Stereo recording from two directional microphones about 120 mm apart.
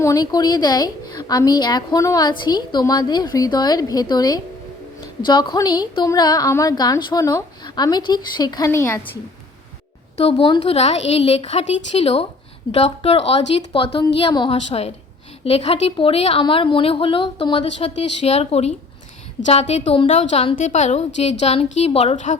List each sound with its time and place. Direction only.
0.0 s a woman's voice: 30° left (ahead or behind)
8.7 s a woman's voice: 20° left (ahead or behind)
10.2 s a woman's voice: 55° left (ahead or behind)
16.4 s a woman's voice: 45° left (ahead or behind); by 20.0 s 65° left (ahead or behind)
20.0 s a woman's voice: 55° left (ahead or behind)
20.6 s a woman's voice: 80° left